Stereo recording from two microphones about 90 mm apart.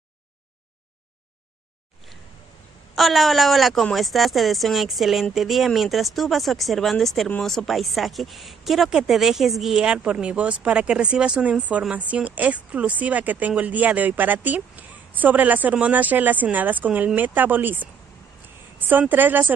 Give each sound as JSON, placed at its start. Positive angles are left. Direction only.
{"t": 3.0, "sound": "a woman's voice", "side_deg": 0}